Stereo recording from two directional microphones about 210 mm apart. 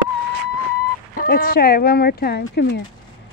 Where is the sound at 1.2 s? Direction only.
45° left (ahead or behind).